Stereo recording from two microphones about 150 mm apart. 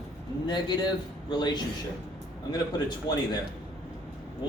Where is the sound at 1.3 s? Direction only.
30° left (ahead or behind).